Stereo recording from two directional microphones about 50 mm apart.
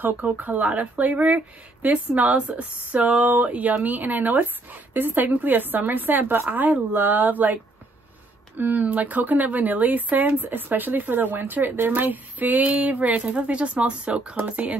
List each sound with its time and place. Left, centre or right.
0.0 s speech: right